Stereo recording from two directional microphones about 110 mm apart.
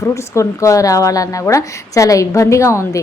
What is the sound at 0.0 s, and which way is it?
A woman's voice, 25° left (ahead or behind).